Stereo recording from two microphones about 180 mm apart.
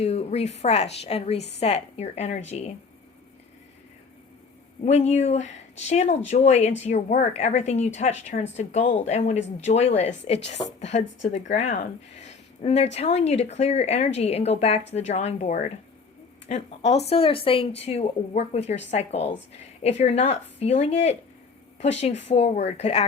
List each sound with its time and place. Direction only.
0.0 s a woman's voice: 35° left (ahead or behind)
4.9 s a woman's voice: 40° left (ahead or behind)